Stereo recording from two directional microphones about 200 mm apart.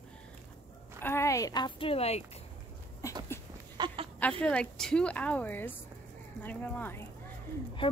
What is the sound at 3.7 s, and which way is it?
Chicken, 25° right (ahead or behind).